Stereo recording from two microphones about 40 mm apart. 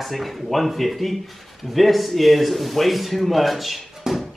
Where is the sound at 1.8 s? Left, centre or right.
Centre.